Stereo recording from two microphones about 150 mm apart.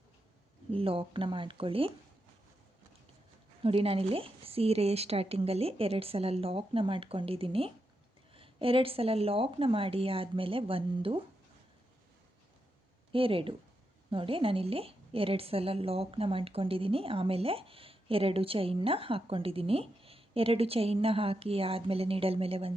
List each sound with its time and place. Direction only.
0.7 s a woman's voice: 40° right (ahead or behind)
3.6 s a woman's voice: 40° right (ahead or behind)
13.1 s a woman's voice: 35° right (ahead or behind)